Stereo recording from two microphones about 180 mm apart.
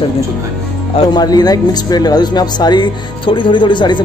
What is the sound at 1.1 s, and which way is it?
Speech, 20° left (ahead or behind).